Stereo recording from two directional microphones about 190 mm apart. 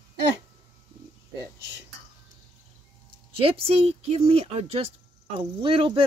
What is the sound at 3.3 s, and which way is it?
Speech, 30° right (ahead or behind).